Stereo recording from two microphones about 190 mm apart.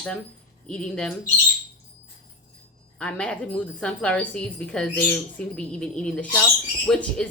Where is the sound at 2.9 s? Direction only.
5° left (ahead or behind).